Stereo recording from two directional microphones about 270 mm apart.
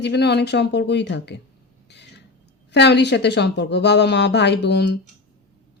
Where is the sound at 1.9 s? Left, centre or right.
Left.